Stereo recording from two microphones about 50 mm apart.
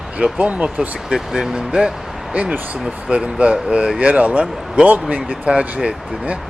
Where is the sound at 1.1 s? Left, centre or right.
Centre.